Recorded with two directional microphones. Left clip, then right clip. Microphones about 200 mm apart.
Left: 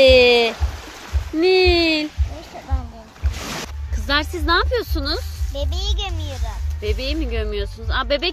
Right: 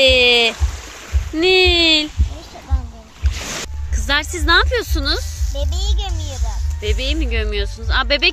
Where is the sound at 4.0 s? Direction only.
5° right (ahead or behind).